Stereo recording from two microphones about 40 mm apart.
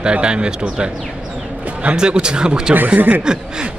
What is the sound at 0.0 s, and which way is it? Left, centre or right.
Speech, right.